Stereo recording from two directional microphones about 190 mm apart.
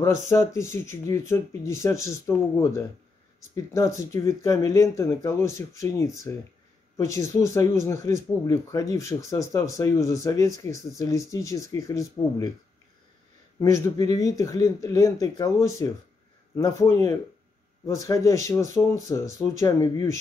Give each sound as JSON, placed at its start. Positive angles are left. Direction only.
{"t": 0.0, "sound": "speech", "side_deg": 15}
{"t": 13.6, "sound": "speech", "side_deg": 15}